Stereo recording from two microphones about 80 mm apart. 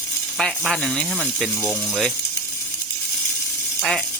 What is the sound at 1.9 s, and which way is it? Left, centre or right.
Speech, centre.